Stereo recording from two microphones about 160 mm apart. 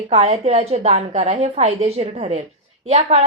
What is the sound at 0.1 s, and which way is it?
A woman's voice, 40° right (ahead or behind).